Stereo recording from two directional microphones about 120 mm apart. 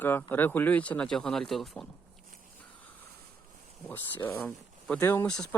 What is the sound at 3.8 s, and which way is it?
Speech, 15° left (ahead or behind).